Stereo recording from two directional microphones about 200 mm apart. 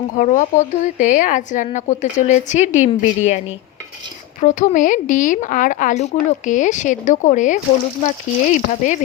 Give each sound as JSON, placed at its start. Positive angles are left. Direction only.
{"t": 0.2, "sound": "a woman's voice", "side_deg": 40}